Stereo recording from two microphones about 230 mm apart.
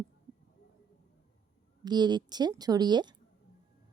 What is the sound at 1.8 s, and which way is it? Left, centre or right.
A woman's voice, centre.